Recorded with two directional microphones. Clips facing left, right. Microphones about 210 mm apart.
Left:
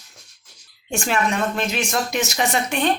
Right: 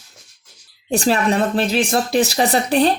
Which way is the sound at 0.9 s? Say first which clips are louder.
Right 5 dB; 35° right (ahead or behind).